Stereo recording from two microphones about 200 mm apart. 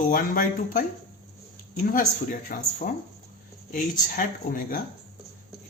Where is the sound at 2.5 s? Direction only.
40° left (ahead or behind).